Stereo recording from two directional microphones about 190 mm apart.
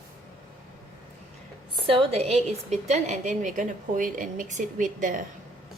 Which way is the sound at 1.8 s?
30° right (ahead or behind).